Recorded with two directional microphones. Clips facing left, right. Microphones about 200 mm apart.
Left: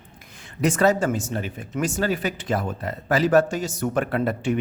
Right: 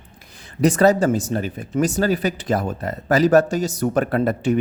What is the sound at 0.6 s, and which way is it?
Speech, 35° right (ahead or behind).